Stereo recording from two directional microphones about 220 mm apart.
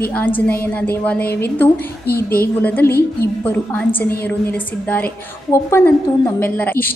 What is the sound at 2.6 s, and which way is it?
A woman's voice, 10° left (ahead or behind).